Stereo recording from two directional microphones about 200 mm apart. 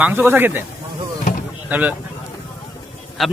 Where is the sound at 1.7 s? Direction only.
10° right (ahead or behind).